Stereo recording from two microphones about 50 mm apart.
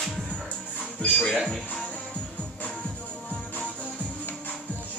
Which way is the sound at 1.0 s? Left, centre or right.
Centre.